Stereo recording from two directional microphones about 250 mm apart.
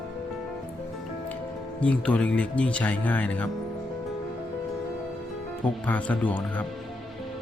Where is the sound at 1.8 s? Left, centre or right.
Centre.